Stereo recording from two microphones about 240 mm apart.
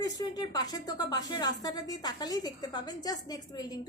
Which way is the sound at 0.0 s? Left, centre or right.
Centre.